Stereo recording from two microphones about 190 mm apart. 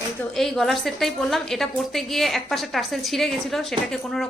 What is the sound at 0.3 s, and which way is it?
A woman's voice, centre (ahead or behind).